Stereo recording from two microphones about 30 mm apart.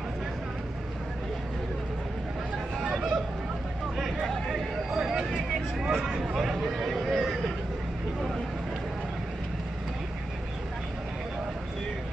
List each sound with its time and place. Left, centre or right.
2.8 s chatter: right
3.9 s a sound: centre
4.5 s vehicle: centre
6.2 s speech: centre